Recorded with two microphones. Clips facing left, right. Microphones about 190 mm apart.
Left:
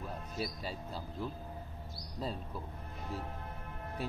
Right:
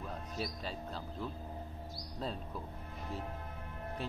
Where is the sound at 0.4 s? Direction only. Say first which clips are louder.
Left 1 dB; 5° left (ahead or behind).